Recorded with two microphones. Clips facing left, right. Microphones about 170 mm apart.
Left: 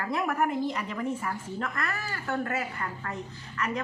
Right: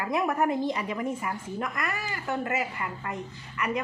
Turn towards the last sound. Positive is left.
turn(degrees=-15)  # may be behind; listen again after turning